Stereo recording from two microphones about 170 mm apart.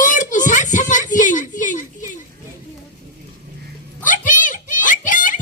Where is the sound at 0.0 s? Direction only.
50° left (ahead or behind).